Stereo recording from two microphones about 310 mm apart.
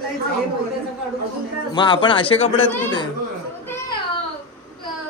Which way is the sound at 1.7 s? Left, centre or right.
Centre.